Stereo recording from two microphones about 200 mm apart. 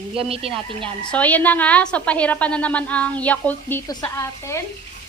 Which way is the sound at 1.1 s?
5° left (ahead or behind).